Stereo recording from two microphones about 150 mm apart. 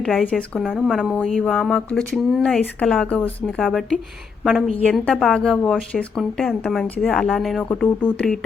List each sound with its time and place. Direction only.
0.0 s a woman's voice: 5° left (ahead or behind)